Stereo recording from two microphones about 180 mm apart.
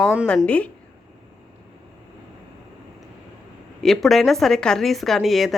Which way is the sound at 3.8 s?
Centre (ahead or behind).